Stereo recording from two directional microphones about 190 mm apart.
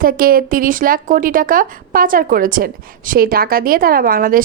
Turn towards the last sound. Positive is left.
turn(degrees=-50)  # may be behind; listen again after turning